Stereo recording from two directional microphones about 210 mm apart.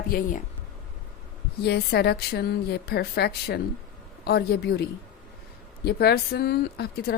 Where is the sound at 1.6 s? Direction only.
50° left (ahead or behind).